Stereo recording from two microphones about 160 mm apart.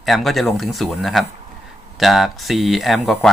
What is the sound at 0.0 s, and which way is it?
Speech, centre (ahead or behind).